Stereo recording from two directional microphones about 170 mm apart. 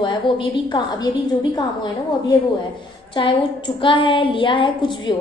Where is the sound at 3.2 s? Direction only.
30° left (ahead or behind).